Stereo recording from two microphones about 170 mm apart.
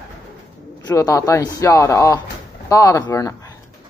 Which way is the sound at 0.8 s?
20° left (ahead or behind).